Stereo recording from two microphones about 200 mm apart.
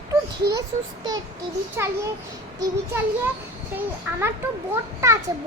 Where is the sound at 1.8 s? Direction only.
15° right (ahead or behind).